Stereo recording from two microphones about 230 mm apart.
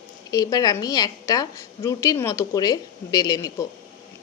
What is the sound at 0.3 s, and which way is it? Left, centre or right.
A woman's voice, centre.